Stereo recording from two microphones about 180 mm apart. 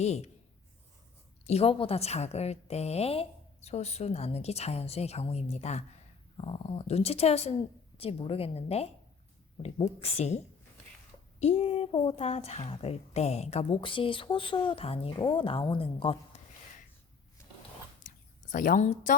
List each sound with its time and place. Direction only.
0.0 s a woman's voice: 35° left (ahead or behind)
1.5 s a woman's voice: 35° left (ahead or behind)
18.5 s a woman's voice: 45° left (ahead or behind)